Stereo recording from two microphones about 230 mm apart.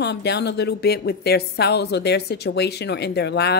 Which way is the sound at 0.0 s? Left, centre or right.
Left.